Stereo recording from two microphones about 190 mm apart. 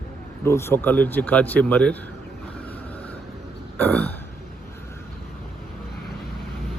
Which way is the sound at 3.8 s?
10° left (ahead or behind).